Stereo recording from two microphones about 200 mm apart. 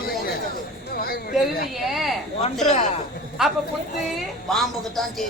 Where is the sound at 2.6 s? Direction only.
35° left (ahead or behind).